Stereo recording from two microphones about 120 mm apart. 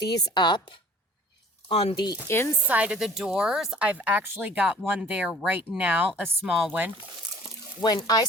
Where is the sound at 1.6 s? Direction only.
55° left (ahead or behind).